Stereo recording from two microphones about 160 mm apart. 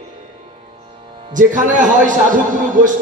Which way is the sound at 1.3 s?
55° right (ahead or behind).